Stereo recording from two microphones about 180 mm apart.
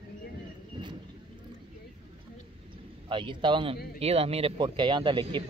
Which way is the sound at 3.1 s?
25° right (ahead or behind).